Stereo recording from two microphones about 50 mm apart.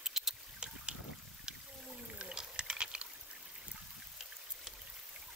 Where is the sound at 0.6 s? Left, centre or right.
Right.